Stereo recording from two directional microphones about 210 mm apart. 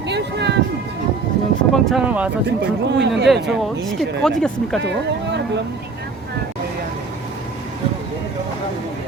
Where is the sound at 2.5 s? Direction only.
55° right (ahead or behind).